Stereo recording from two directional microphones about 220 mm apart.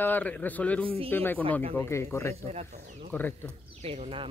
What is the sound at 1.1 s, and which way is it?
Speech, 10° left (ahead or behind).